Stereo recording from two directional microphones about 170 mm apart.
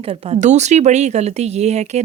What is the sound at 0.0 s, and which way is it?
Speech, 35° right (ahead or behind).